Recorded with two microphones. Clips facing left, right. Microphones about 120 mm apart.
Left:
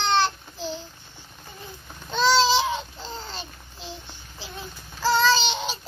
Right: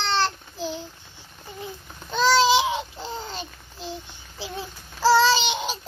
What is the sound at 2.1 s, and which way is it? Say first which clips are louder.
Babbling: right 1 dB; 10° right (ahead or behind).